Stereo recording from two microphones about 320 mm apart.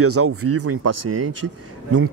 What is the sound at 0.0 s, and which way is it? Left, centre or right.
Speech, right.